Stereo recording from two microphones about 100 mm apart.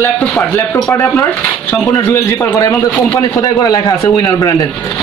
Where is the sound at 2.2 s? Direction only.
35° left (ahead or behind).